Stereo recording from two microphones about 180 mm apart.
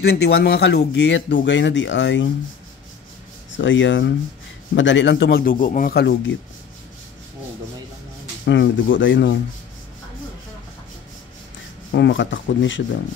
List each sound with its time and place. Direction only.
0.0 s speech: 65° left (ahead or behind); by 2.2 s 85° left
3.5 s a man's voice: 90° left; by 6.3 s 70° left (ahead or behind)
8.5 s speech: 85° left
11.9 s speech: 85° left